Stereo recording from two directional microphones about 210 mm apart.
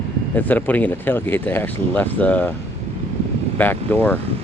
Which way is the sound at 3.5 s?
10° left (ahead or behind).